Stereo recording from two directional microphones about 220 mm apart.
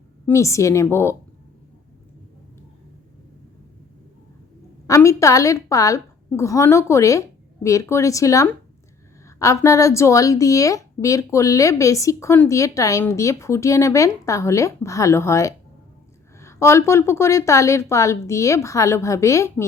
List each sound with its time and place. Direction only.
0.3 s speech: 15° left (ahead or behind)
4.9 s speech: 15° left (ahead or behind)